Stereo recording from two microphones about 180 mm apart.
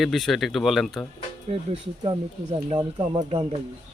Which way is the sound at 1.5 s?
30° right (ahead or behind).